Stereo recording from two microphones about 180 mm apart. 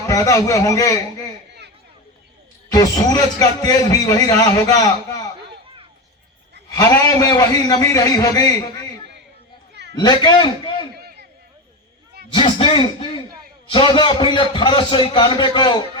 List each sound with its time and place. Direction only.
0.1 s a man's voice: 20° left (ahead or behind)
2.6 s a man's voice: 20° left (ahead or behind)
6.7 s a man's voice: 15° left (ahead or behind)
9.9 s a man's voice: 25° left (ahead or behind)
10.9 s a sound: 60° right (ahead or behind)
12.3 s a man's voice: 25° left (ahead or behind)